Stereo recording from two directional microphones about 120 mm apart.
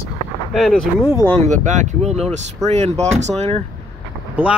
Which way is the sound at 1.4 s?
90° right.